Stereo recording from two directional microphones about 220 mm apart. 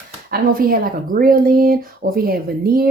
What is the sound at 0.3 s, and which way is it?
Speech, 40° right (ahead or behind).